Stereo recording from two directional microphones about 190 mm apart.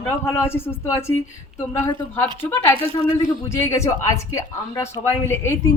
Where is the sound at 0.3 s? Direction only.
15° left (ahead or behind).